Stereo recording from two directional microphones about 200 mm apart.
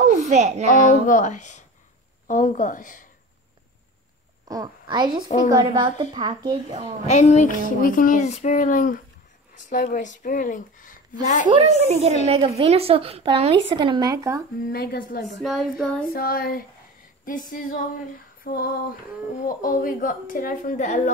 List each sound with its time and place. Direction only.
0.3 s a woman's voice: 35° right (ahead or behind)
0.7 s speech: 40° left (ahead or behind)
4.5 s a woman's voice: 20° right (ahead or behind)
7.1 s speech: 35° left (ahead or behind)
11.8 s a woman's voice: 35° right (ahead or behind); by 14.4 s 15° right (ahead or behind)
14.6 s a woman's voice: 50° left (ahead or behind)
15.2 s a woman's voice: centre (ahead or behind)
16.1 s a woman's voice: 45° left (ahead or behind)
18.4 s female singing: 45° left (ahead or behind)
19.4 s a woman's voice: 45° left (ahead or behind)